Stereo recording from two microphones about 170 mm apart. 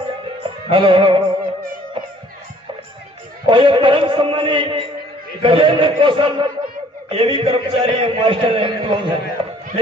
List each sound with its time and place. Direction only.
0.4 s music: 30° right (ahead or behind)
3.4 s a man's voice: 30° right (ahead or behind)